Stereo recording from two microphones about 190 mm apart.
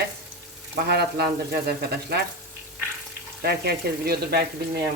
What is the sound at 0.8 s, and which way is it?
Speech, 60° right (ahead or behind).